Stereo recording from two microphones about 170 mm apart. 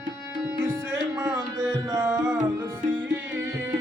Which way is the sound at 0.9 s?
15° right (ahead or behind).